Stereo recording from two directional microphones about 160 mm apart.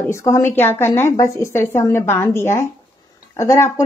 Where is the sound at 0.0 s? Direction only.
15° left (ahead or behind).